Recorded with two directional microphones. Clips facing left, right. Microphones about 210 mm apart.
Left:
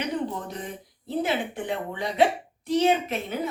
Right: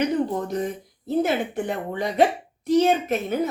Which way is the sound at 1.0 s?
45° right (ahead or behind).